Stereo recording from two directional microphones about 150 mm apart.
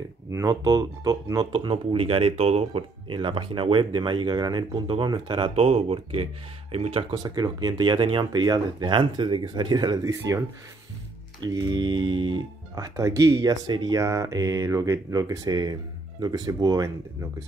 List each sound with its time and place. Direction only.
0.3 s speech: 20° right (ahead or behind)
11.4 s speech: 30° right (ahead or behind)
12.7 s speech: 20° right (ahead or behind)